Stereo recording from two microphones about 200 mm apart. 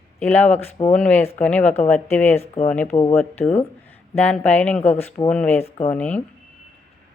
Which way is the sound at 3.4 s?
10° left (ahead or behind).